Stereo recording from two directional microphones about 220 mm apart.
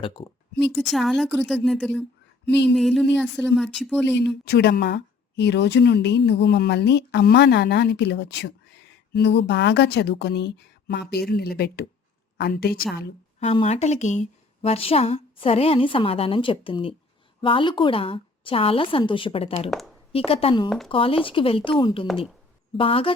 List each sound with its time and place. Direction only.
0.0 s speech: 20° left (ahead or behind)
0.8 s a woman's voice: centre (ahead or behind)
4.4 s a woman's voice: 45° left (ahead or behind)
13.4 s speech: 30° left (ahead or behind)
20.7 s a woman's voice: centre (ahead or behind)
20.9 s speech: 25° left (ahead or behind)